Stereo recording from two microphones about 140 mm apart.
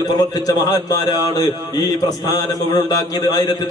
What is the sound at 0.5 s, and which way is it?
A man's voice, 25° left (ahead or behind).